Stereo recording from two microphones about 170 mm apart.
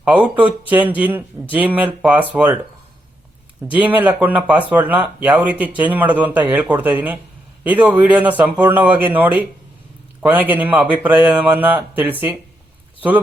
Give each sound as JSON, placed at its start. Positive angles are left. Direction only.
{"t": 0.0, "sound": "speech", "side_deg": -10}
{"t": 3.7, "sound": "speech", "side_deg": -10}